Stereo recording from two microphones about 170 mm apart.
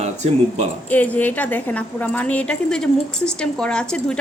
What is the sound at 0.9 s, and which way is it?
A woman's voice, 10° left (ahead or behind).